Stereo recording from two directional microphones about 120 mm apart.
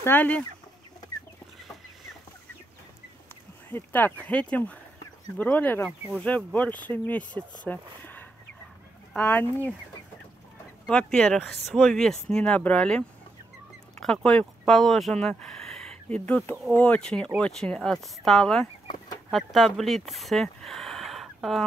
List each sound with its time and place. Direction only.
0.0 s speech: 15° left (ahead or behind)
3.7 s speech: 15° left (ahead or behind)
10.9 s speech: 5° left (ahead or behind)